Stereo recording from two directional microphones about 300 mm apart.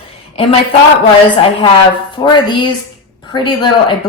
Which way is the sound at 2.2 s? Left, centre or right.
Centre.